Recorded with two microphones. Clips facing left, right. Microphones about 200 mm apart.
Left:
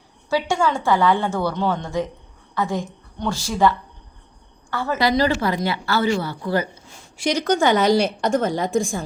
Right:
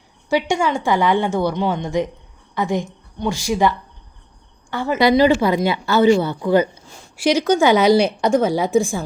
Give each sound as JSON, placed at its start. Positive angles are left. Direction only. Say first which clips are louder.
{"t": 0.3, "sound": "a woman's voice", "louder": "right 2 dB", "side_deg": -15}
{"t": 7.2, "sound": "a woman's voice", "louder": "right 4 dB", "side_deg": -5}